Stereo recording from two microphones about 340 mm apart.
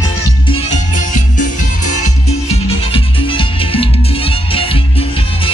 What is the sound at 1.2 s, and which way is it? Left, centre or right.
Music, left.